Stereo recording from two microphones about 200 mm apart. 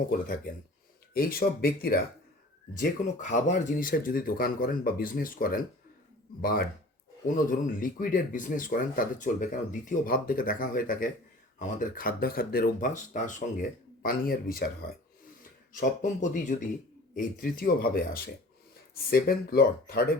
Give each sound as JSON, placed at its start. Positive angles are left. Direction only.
{"t": 0.1, "sound": "speech", "side_deg": 45}